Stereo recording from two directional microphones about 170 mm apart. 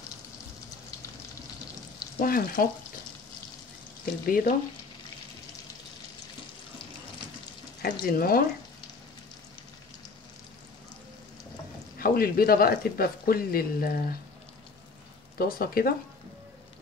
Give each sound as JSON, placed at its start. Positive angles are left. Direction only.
{"t": 2.1, "sound": "speech", "side_deg": 55}
{"t": 4.3, "sound": "speech", "side_deg": 55}
{"t": 7.8, "sound": "speech", "side_deg": 60}
{"t": 12.0, "sound": "speech", "side_deg": 60}
{"t": 15.3, "sound": "speech", "side_deg": 60}